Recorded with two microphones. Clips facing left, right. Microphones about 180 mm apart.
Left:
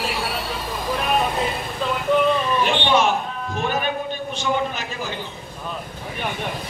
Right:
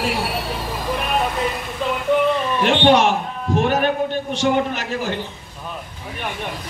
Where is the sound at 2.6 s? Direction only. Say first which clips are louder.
Right 4 dB; 70° right (ahead or behind).